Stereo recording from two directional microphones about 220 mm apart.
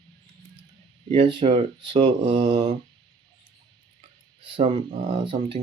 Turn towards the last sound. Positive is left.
turn(degrees=-25)  # may be behind; listen again after turning